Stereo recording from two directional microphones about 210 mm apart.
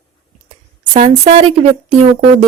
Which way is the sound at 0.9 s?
35° right (ahead or behind).